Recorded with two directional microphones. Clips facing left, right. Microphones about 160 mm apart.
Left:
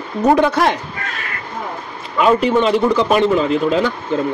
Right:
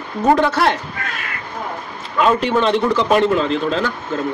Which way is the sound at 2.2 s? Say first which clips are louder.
Left 2 dB; 5° left (ahead or behind).